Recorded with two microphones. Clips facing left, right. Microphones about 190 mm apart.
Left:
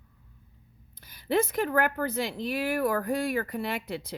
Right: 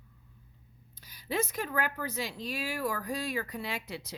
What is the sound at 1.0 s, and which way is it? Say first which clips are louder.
A woman's voice: left 6 dB; 55° left (ahead or behind).